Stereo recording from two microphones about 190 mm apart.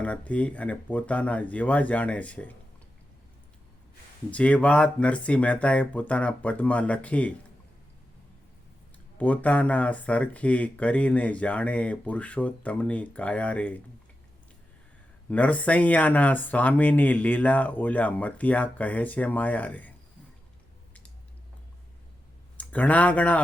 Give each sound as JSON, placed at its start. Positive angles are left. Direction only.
{"t": 0.0, "sound": "speech", "side_deg": 5}
{"t": 4.3, "sound": "speech", "side_deg": 5}
{"t": 9.1, "sound": "speech", "side_deg": 10}
{"t": 15.3, "sound": "speech", "side_deg": 5}
{"t": 22.5, "sound": "speech", "side_deg": 10}